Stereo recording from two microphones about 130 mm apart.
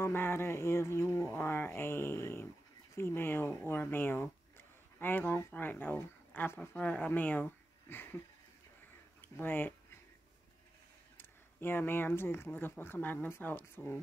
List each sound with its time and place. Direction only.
0.0 s speech: 20° left (ahead or behind)
9.2 s speech: 15° left (ahead or behind)
11.1 s speech: 15° left (ahead or behind)